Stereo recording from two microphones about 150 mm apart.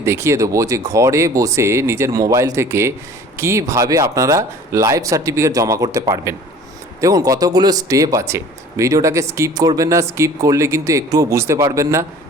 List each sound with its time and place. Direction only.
0.0 s speech: 20° right (ahead or behind)